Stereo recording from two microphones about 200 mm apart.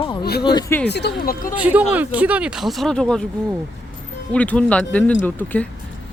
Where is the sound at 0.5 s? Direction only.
15° left (ahead or behind).